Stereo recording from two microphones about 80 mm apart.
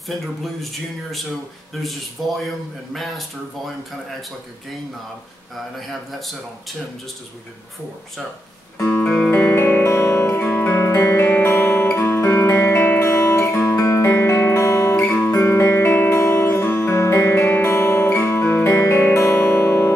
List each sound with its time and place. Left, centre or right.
0.1 s speech: centre
1.8 s speech: centre
5.8 s speech: centre
8.7 s music: left
9.0 s music: centre
9.3 s music: left